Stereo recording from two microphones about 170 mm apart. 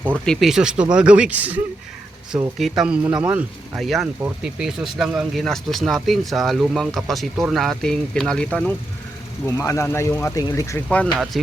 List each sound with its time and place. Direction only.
0.3 s speech: centre (ahead or behind)
3.8 s speech: centre (ahead or behind)
9.5 s speech: 15° left (ahead or behind)
10.8 s speech: 5° left (ahead or behind)